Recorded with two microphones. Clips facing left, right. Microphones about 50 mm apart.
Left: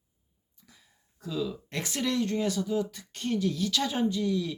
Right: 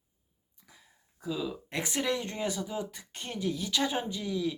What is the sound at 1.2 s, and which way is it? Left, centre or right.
Speech, centre.